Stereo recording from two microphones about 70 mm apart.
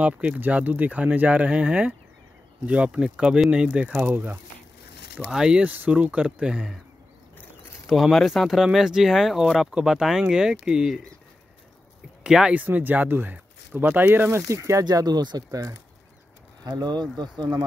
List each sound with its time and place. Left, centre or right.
0.0 s speech: centre
5.3 s speech: centre
7.8 s speech: centre
12.2 s speech: centre
12.5 s speech: right
14.5 s speech: right
14.9 s speech: right
16.6 s speech: right